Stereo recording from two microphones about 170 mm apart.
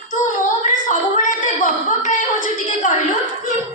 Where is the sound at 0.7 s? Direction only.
50° left (ahead or behind).